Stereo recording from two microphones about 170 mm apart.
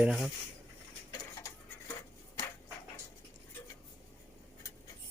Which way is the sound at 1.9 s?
20° left (ahead or behind).